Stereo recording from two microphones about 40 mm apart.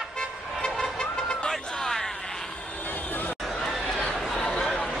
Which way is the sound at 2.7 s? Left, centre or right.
Left.